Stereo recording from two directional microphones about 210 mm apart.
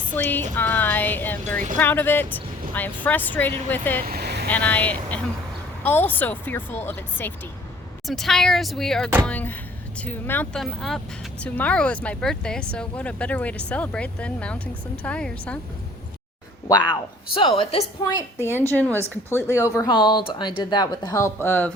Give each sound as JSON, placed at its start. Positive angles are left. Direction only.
{"t": 0.1, "sound": "a woman's voice", "side_deg": 10}
{"t": 4.0, "sound": "vehicle", "side_deg": -45}
{"t": 4.4, "sound": "a woman's voice", "side_deg": 5}
{"t": 16.6, "sound": "a woman's voice", "side_deg": 20}